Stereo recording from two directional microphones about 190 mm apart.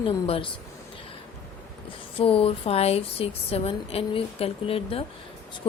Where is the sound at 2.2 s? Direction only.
30° left (ahead or behind).